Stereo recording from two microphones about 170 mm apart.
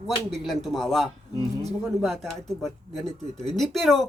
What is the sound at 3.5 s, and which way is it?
Speech, centre (ahead or behind).